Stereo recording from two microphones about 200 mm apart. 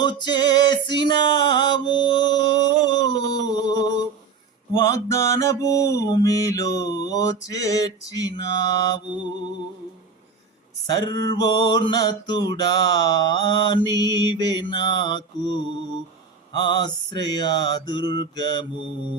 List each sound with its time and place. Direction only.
0.0 s mantra: 20° left (ahead or behind)
1.0 s music: 20° left (ahead or behind)
4.9 s mantra: 15° left (ahead or behind)
10.8 s mantra: 20° left (ahead or behind)